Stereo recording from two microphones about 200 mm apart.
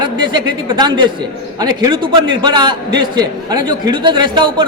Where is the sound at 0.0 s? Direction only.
20° right (ahead or behind).